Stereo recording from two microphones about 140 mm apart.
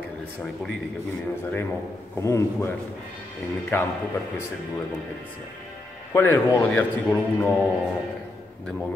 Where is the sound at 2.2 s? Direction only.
20° left (ahead or behind).